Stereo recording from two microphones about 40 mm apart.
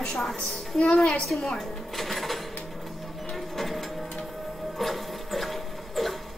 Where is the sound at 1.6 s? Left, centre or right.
Centre.